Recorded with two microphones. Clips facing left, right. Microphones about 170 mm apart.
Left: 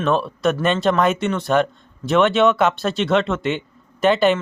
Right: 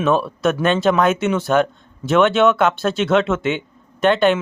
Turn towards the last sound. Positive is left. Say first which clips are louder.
# right 1 dB
turn(degrees=0)  # may be behind; listen again after turning